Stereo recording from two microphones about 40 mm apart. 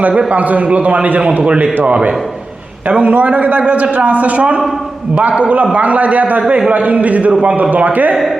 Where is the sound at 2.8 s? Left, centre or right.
Right.